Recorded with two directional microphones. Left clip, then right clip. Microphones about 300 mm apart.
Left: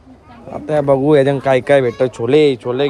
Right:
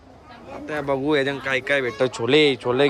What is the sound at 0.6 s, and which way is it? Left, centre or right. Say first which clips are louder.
Speech: left 10 dB; centre.